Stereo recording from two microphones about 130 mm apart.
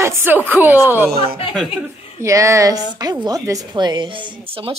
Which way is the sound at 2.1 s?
20° right (ahead or behind).